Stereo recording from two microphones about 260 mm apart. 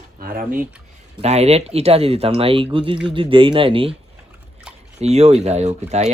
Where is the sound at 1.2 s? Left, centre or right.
Right.